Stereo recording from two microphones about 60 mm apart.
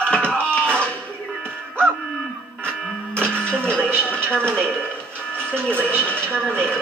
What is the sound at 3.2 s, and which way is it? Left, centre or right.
Television, centre.